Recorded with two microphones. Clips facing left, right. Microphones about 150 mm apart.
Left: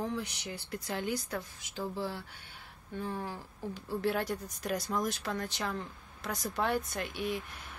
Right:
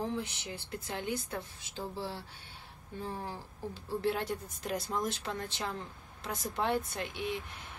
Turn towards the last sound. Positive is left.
turn(degrees=-25)  # may be behind; listen again after turning